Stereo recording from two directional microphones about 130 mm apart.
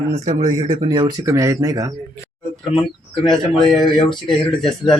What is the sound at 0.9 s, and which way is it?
Speech, 35° right (ahead or behind).